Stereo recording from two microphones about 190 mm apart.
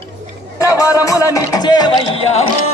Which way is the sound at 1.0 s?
15° left (ahead or behind).